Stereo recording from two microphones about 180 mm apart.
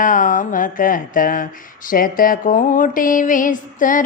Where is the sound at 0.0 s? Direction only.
45° left (ahead or behind).